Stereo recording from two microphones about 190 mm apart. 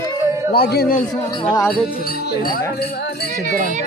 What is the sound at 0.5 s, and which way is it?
Speech, 55° left (ahead or behind).